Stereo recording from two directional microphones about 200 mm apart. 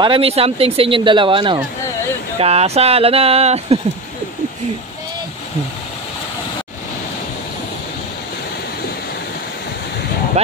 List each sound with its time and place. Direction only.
0.0 s speech: 25° right (ahead or behind)